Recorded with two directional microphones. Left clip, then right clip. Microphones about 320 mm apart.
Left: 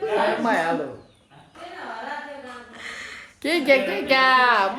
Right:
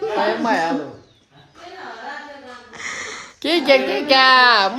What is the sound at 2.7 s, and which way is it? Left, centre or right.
Speech, centre.